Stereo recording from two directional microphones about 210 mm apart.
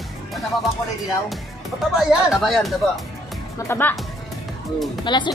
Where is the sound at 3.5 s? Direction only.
10° left (ahead or behind).